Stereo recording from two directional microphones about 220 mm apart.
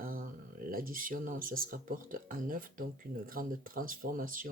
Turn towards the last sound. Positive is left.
turn(degrees=-40)  # may be behind; listen again after turning